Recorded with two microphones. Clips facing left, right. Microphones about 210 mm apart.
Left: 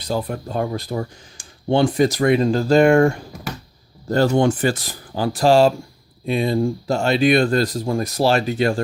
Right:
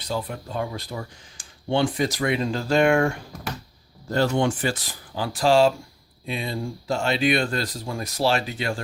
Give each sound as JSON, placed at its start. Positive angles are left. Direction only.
{"t": 0.1, "sound": "speech", "side_deg": 45}